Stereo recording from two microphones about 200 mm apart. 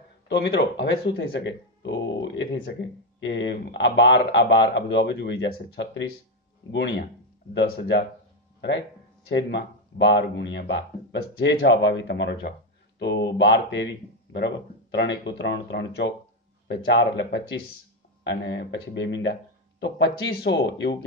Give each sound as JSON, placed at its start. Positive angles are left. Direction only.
{"t": 0.3, "sound": "speech", "side_deg": 60}